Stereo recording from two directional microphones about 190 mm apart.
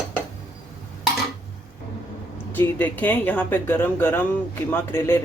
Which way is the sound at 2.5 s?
10° left (ahead or behind).